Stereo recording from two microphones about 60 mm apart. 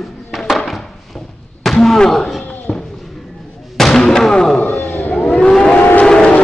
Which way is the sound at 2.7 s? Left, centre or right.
Centre.